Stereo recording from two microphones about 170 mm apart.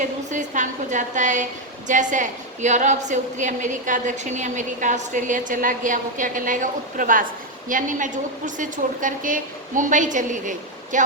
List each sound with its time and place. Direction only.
0.0 s a woman's voice: 45° right (ahead or behind)